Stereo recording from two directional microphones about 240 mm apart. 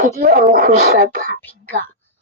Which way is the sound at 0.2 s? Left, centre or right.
Right.